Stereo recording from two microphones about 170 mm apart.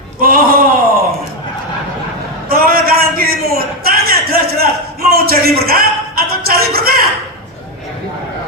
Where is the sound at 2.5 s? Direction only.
60° right (ahead or behind).